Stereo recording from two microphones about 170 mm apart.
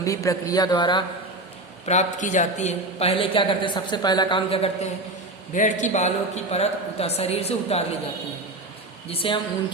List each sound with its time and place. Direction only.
0.0 s a man's voice: 20° left (ahead or behind)
1.9 s a woman's voice: 45° left (ahead or behind)
5.5 s a woman's voice: 45° left (ahead or behind)
9.0 s a woman's voice: 30° left (ahead or behind)